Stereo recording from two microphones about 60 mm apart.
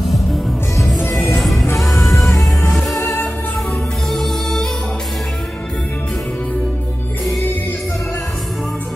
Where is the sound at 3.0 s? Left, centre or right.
Left.